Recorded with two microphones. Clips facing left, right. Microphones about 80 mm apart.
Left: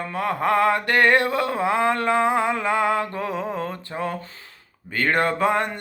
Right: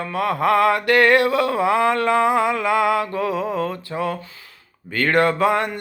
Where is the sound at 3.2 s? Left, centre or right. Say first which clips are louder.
Right 5 dB; right.